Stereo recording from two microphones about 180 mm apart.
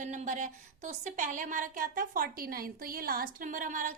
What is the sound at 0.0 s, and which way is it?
Speech, 40° right (ahead or behind).